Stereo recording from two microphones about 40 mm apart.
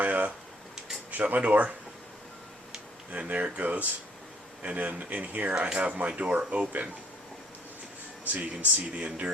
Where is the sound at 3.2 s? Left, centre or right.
Right.